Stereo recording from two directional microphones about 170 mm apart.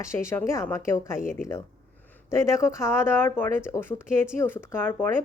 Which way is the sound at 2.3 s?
15° left (ahead or behind).